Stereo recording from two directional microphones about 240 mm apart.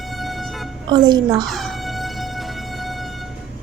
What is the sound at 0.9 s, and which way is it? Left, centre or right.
Speech, centre.